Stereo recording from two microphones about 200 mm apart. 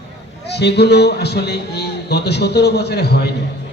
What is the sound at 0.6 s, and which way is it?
A woman's voice, 55° left (ahead or behind).